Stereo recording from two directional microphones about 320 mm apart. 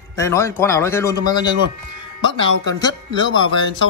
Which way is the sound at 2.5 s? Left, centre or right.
Right.